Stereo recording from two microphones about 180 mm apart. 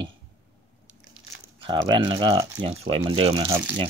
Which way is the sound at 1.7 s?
25° right (ahead or behind).